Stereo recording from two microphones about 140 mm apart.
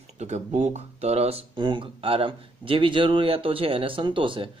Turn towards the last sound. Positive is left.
turn(degrees=-35)  # may be behind; listen again after turning